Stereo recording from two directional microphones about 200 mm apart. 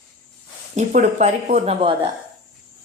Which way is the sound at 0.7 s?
35° right (ahead or behind).